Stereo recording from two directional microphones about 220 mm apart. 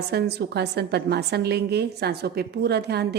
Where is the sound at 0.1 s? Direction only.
45° right (ahead or behind).